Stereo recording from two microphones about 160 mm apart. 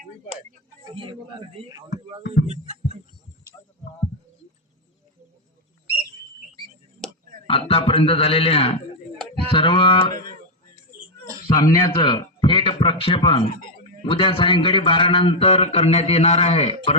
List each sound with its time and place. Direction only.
0.9 s a man's voice: 30° right (ahead or behind)
2.5 s music: 45° right (ahead or behind)
3.6 s a sound: 20° left (ahead or behind)
7.4 s a man's voice: 35° left (ahead or behind)
11.4 s a man's voice: 25° left (ahead or behind); by 16.9 s 40° left (ahead or behind)